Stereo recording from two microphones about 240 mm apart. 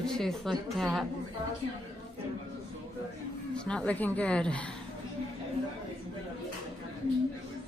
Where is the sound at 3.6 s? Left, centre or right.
Centre.